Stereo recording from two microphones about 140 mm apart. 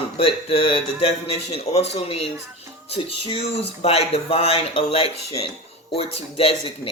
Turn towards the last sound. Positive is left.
turn(degrees=45)  # may be behind; listen again after turning